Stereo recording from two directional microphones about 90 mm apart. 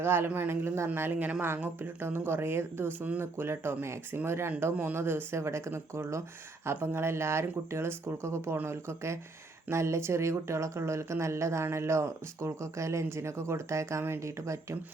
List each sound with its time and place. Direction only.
0.0 s speech: 25° right (ahead or behind)